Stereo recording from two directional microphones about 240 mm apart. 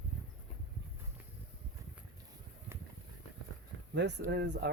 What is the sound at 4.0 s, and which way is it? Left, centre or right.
Speech, right.